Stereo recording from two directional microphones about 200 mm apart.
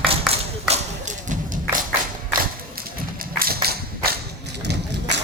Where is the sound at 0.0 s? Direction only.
30° right (ahead or behind).